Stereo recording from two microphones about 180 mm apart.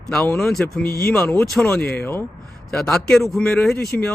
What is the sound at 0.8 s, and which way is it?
Speech, 55° left (ahead or behind).